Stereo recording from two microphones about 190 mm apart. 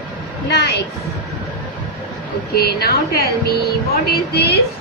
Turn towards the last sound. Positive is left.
turn(degrees=60)  # may be behind; listen again after turning